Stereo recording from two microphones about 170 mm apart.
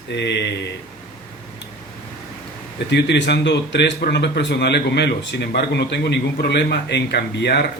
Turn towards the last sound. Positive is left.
turn(degrees=75)  # may be behind; listen again after turning